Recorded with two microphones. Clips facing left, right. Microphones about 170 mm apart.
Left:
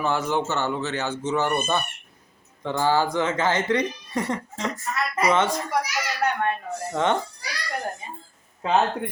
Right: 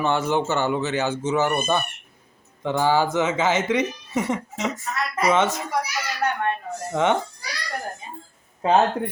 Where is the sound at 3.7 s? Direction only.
20° right (ahead or behind).